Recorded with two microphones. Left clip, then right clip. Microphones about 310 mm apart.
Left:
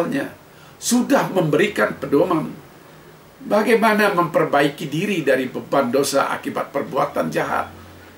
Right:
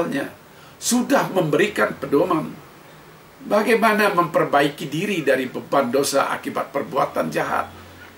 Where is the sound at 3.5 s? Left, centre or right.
Centre.